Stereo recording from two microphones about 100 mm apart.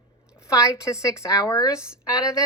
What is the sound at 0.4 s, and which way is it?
Speech, 35° left (ahead or behind).